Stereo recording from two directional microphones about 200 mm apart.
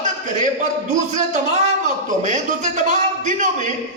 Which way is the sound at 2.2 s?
40° right (ahead or behind).